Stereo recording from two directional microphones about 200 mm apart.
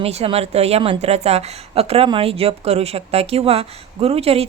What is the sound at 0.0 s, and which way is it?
A woman's voice, 30° right (ahead or behind).